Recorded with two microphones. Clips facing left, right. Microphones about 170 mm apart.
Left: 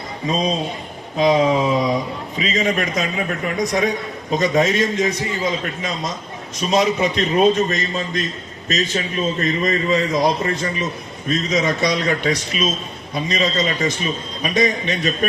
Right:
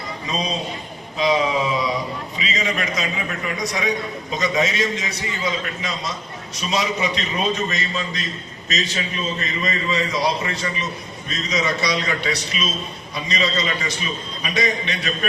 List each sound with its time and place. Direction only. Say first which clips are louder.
1.2 s a man's voice: left 4 dB; 50° left (ahead or behind)